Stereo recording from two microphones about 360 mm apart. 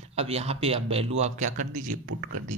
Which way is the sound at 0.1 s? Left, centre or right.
Centre.